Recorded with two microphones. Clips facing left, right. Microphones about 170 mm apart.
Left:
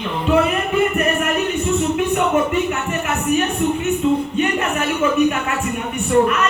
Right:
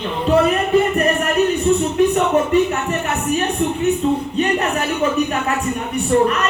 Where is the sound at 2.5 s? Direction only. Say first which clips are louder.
Right 4 dB; 35° right (ahead or behind).